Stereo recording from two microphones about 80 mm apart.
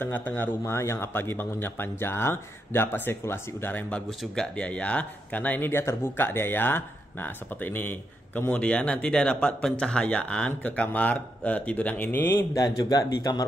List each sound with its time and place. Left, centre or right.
0.0 s speech: centre
12.5 s speech: left